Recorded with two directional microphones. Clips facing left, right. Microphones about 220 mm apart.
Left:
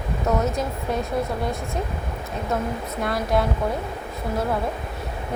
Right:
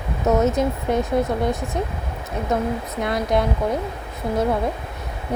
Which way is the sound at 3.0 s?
20° right (ahead or behind).